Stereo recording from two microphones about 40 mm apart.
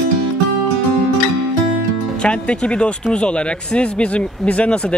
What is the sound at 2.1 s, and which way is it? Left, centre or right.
Speech, left.